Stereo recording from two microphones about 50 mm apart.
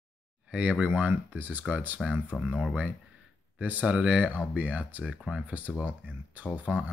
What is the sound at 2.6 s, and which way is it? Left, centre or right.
Speech, centre.